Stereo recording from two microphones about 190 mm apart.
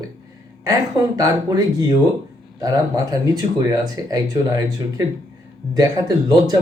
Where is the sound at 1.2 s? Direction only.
20° right (ahead or behind).